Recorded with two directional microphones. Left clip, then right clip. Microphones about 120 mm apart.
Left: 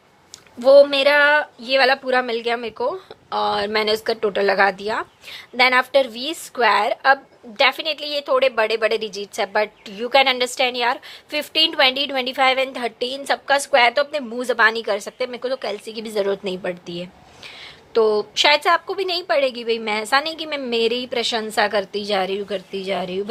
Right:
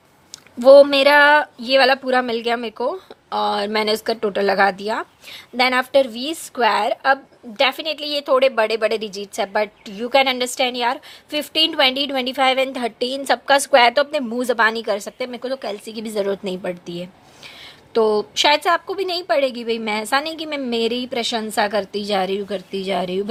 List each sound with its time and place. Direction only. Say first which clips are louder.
0.6 s a woman's voice: right 2 dB; 90° right; by 7.9 s 40° right (ahead or behind)
7.9 s a woman's voice: right 2 dB; 50° right (ahead or behind)
17.9 s speech: even; 65° right (ahead or behind)
18.4 s a woman's voice: left 1 dB; 40° right (ahead or behind); by 23.2 s 65° right (ahead or behind)